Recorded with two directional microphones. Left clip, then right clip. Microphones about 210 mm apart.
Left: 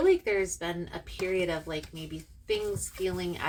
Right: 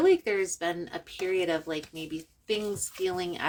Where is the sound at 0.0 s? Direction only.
45° right (ahead or behind).